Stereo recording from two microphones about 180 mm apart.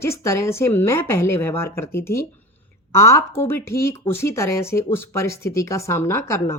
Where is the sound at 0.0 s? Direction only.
15° left (ahead or behind).